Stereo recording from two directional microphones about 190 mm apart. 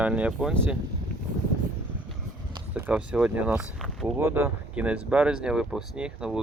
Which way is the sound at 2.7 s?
5° right (ahead or behind).